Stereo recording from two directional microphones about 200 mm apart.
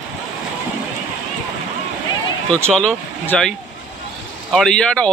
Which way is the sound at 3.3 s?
5° left (ahead or behind).